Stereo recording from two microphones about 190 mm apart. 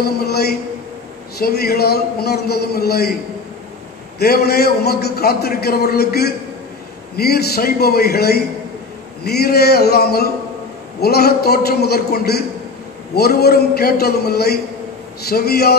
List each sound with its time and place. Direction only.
0.0 s a man's voice: 55° left (ahead or behind)
4.2 s a man's voice: 55° left (ahead or behind)